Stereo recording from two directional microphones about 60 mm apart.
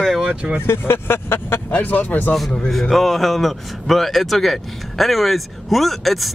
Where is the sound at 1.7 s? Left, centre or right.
Left.